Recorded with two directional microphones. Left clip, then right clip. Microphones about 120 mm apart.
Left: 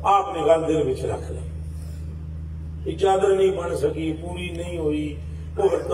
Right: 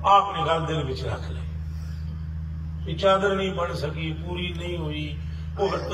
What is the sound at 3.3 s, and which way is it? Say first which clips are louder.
A man's voice: left 6 dB; 30° left (ahead or behind).